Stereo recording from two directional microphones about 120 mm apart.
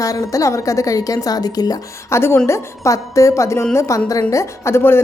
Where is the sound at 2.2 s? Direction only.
20° left (ahead or behind).